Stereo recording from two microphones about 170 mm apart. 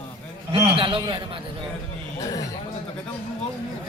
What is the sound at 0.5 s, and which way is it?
Speech, 30° right (ahead or behind).